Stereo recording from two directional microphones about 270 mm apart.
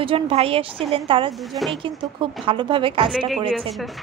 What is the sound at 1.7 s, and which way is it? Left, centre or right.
A woman's voice, centre.